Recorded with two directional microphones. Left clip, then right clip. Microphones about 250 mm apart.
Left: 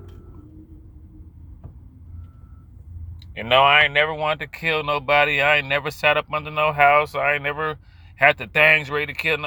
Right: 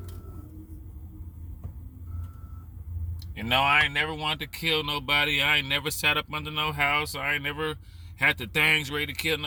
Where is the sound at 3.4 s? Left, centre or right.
Centre.